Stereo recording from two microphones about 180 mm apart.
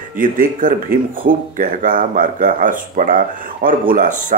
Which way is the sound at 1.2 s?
40° right (ahead or behind).